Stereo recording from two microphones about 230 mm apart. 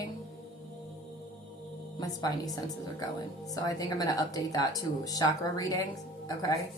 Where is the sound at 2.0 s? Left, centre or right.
Centre.